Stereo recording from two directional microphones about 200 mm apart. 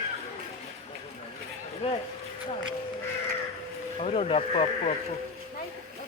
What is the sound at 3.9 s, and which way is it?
Speech, 30° left (ahead or behind).